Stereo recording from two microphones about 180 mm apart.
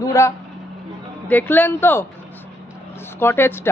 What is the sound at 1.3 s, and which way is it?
Speech, 10° left (ahead or behind).